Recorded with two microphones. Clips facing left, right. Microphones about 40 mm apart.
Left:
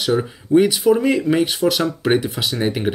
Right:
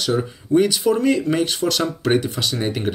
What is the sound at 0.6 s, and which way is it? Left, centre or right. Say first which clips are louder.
Speech: left 3 dB; centre.